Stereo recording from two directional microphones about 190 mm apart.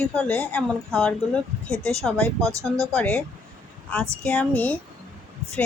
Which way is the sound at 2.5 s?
15° right (ahead or behind).